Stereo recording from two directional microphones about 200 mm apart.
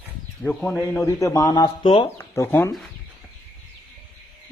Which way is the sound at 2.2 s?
15° left (ahead or behind).